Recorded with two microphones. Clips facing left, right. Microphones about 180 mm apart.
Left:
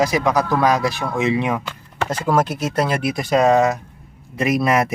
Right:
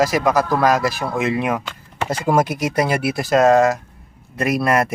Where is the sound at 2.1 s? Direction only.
10° right (ahead or behind).